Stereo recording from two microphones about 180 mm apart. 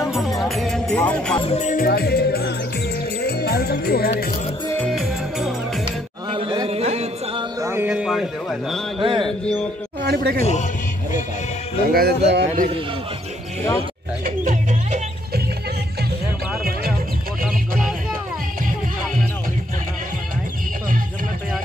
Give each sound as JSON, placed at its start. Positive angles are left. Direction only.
{"t": 0.0, "sound": "music", "side_deg": 0}
{"t": 1.4, "sound": "music", "side_deg": 35}
{"t": 3.2, "sound": "speech", "side_deg": 65}
{"t": 4.9, "sound": "music", "side_deg": 0}
{"t": 5.9, "sound": "music", "side_deg": -30}
{"t": 7.6, "sound": "a sound", "side_deg": -10}
{"t": 9.0, "sound": "mantra", "side_deg": -25}
{"t": 10.0, "sound": "music", "side_deg": -65}
{"t": 10.4, "sound": "a man's voice", "side_deg": 40}
{"t": 11.9, "sound": "speech", "side_deg": -60}
{"t": 14.2, "sound": "music", "side_deg": -45}
{"t": 17.5, "sound": "music", "side_deg": -5}